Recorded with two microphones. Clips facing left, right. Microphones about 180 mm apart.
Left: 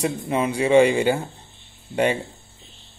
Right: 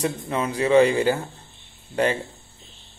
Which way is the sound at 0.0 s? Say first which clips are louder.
Left 2 dB; 10° left (ahead or behind).